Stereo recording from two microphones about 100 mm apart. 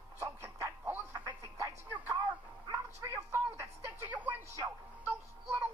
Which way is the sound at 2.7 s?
30° right (ahead or behind).